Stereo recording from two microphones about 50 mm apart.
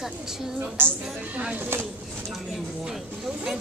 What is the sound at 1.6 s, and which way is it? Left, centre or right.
Speech, right.